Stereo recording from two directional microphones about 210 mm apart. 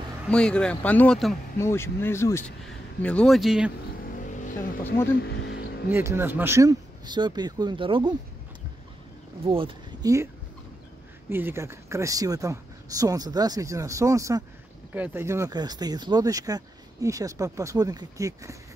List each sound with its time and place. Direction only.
0.3 s a man's voice: 5° left (ahead or behind)
4.2 s vehicle: 40° left (ahead or behind)
5.4 s vehicle: 55° left (ahead or behind)
5.9 s speech: 10° right (ahead or behind)
9.4 s speech: 25° right (ahead or behind)
11.2 s speech: 10° right (ahead or behind)